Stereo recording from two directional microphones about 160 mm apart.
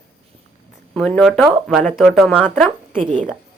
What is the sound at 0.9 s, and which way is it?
Speech, 5° left (ahead or behind).